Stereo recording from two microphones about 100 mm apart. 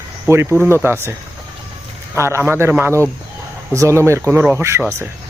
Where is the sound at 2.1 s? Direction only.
25° right (ahead or behind).